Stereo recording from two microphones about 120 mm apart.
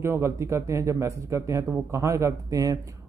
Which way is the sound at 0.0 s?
25° right (ahead or behind).